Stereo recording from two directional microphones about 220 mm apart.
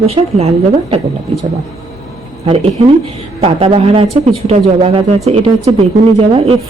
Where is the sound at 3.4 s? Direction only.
25° right (ahead or behind).